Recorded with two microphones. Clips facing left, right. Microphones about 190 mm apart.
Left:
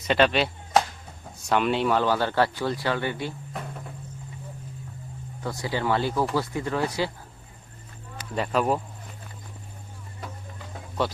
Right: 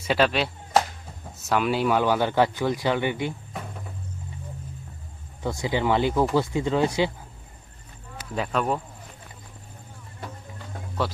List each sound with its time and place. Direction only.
0.0 s whip: 5° right (ahead or behind)
1.5 s speech: 5° right (ahead or behind)
3.5 s a sound: centre (ahead or behind)
5.4 s speech: 20° right (ahead or behind)
8.3 s speech: centre (ahead or behind)